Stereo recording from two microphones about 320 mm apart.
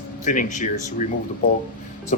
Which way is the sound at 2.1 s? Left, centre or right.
Left.